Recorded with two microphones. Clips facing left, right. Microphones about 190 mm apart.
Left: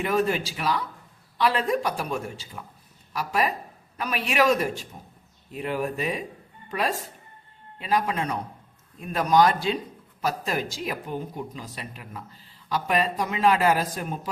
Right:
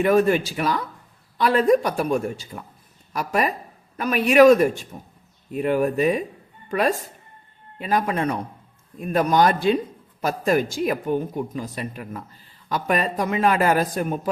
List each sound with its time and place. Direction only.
0.0 s speech: 55° right (ahead or behind)